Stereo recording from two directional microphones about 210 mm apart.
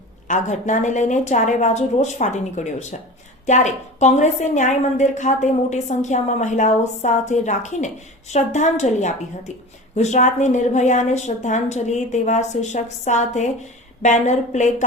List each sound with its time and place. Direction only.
0.3 s a woman's voice: 35° left (ahead or behind)